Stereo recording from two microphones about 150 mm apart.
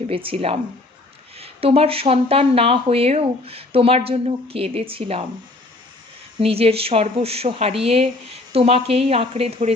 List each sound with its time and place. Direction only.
0.1 s speech: 40° right (ahead or behind)
6.4 s speech: 40° right (ahead or behind)